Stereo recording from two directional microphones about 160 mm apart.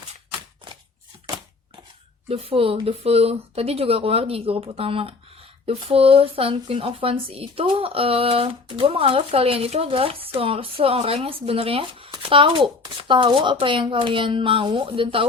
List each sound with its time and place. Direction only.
2.3 s speech: 35° right (ahead or behind)